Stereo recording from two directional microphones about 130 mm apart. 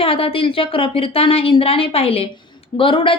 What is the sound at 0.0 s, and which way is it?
A woman's voice, 45° left (ahead or behind).